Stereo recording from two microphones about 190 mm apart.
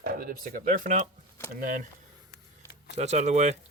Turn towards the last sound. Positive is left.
turn(degrees=-40)  # may be behind; listen again after turning